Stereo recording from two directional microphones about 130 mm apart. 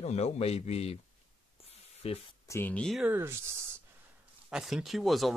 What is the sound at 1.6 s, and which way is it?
Spray, 50° left (ahead or behind).